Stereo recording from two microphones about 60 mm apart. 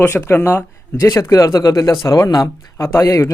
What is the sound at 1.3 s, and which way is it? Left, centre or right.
Speech, left.